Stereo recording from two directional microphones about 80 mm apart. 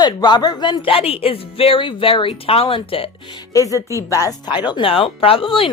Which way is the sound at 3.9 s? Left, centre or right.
Left.